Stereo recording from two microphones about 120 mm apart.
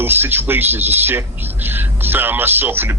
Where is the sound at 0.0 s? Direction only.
15° right (ahead or behind).